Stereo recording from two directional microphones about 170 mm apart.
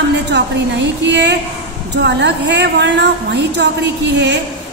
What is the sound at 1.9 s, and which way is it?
A woman's voice, 90° right.